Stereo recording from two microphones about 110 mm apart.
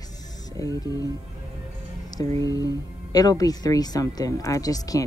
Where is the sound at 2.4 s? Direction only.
30° left (ahead or behind).